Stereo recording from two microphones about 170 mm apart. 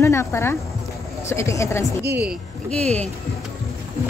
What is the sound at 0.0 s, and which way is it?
Speech, 15° left (ahead or behind).